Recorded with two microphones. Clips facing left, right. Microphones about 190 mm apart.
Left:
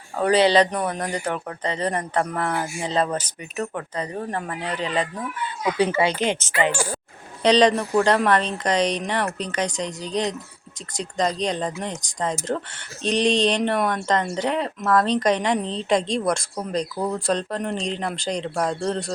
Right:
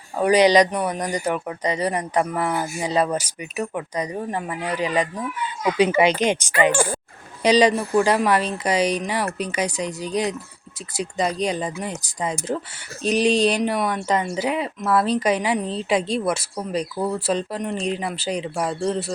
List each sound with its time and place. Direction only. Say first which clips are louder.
0.2 s a woman's voice: right 2 dB; 15° right (ahead or behind)